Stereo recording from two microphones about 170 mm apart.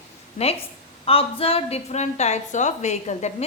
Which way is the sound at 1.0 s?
35° left (ahead or behind).